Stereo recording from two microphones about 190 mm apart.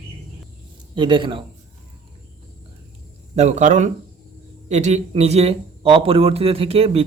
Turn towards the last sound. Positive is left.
turn(degrees=-30)  # may be behind; listen again after turning